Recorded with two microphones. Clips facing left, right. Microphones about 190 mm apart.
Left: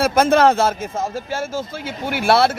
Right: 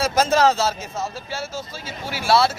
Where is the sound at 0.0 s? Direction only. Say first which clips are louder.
Left 4 dB; 55° left (ahead or behind).